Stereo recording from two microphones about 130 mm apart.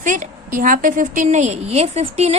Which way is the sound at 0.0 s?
80° right.